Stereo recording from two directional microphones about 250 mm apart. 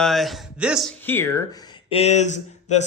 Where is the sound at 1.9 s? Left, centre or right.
Left.